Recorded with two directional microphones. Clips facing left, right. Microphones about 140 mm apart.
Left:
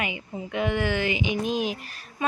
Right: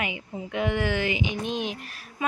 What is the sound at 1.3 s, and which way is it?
Speech, 5° left (ahead or behind).